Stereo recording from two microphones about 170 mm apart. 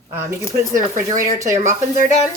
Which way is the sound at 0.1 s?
15° right (ahead or behind).